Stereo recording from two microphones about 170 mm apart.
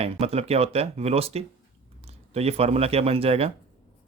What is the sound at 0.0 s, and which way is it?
Speech, 35° right (ahead or behind).